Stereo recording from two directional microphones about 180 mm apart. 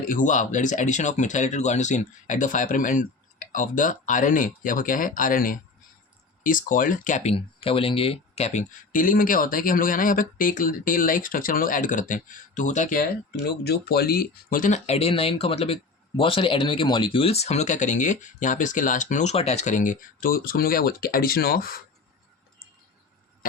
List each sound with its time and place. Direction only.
0.0 s speech: 50° left (ahead or behind)